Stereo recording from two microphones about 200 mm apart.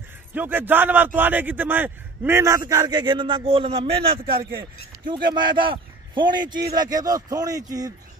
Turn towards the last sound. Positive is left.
turn(degrees=-20)  # may be behind; listen again after turning